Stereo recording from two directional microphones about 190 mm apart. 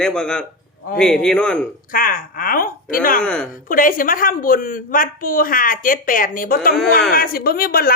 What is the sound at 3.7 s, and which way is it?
A woman's voice, 45° left (ahead or behind).